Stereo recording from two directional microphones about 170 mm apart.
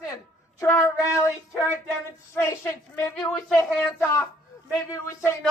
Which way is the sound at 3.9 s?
15° left (ahead or behind).